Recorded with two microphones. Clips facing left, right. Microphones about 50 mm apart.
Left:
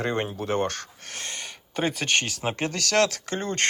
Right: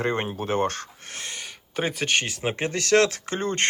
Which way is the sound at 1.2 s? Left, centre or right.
Centre.